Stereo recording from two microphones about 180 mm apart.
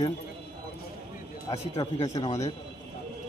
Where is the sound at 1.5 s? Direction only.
35° left (ahead or behind).